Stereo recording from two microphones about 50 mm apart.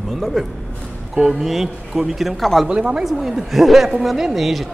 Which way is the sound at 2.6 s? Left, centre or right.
Centre.